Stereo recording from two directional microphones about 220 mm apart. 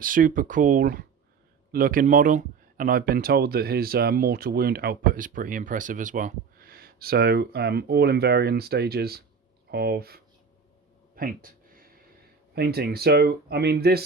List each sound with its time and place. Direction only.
0.0 s speech: 40° right (ahead or behind)
11.1 s a sound: 40° right (ahead or behind)
12.5 s speech: 45° right (ahead or behind)